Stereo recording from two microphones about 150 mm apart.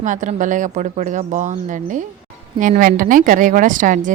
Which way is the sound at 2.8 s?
70° right (ahead or behind).